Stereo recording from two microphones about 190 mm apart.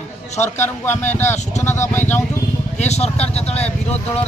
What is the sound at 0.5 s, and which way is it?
Speech, 10° left (ahead or behind).